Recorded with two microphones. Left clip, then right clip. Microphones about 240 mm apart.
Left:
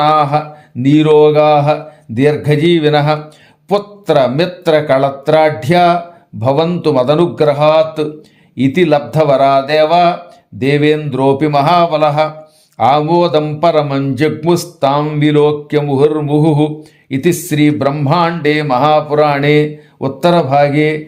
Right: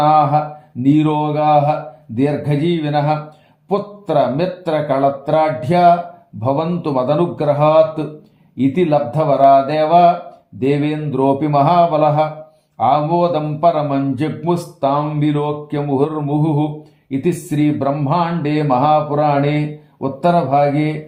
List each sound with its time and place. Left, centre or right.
0.0 s speech: left